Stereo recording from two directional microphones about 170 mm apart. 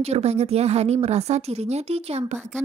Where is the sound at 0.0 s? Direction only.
40° right (ahead or behind).